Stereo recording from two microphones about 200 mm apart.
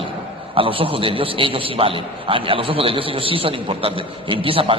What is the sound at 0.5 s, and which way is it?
A man's voice, 25° right (ahead or behind).